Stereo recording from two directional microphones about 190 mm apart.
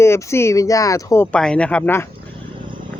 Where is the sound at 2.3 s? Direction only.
25° right (ahead or behind).